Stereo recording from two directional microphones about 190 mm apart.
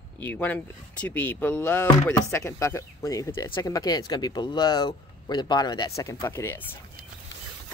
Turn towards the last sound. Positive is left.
turn(degrees=10)  # may be behind; listen again after turning